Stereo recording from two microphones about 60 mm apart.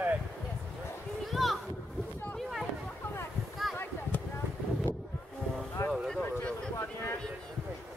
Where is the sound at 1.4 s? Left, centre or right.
Centre.